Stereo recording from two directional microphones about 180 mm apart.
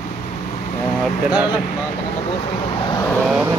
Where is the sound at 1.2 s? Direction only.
5° right (ahead or behind).